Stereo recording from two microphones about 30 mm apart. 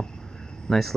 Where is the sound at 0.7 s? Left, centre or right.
Centre.